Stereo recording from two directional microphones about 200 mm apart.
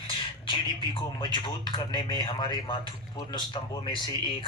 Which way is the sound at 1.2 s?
20° left (ahead or behind).